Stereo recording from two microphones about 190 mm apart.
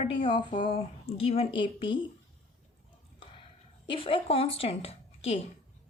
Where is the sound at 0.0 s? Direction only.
30° left (ahead or behind).